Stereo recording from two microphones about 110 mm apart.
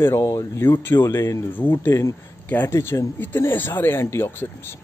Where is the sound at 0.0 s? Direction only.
30° left (ahead or behind).